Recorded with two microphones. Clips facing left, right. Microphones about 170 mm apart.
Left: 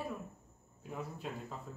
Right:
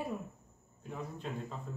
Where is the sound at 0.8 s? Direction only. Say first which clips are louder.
Right 1 dB; 5° left (ahead or behind).